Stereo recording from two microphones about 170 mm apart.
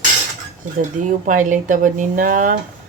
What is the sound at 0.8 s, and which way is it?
Speech, 50° right (ahead or behind).